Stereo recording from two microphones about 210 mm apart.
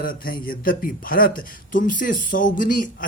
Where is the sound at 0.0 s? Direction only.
45° left (ahead or behind).